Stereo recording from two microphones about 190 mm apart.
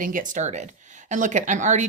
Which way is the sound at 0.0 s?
45° right (ahead or behind).